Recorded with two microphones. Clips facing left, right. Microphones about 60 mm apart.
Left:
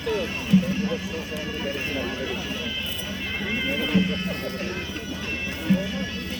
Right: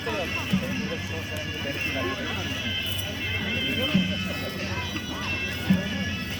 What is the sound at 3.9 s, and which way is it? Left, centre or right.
Music, centre.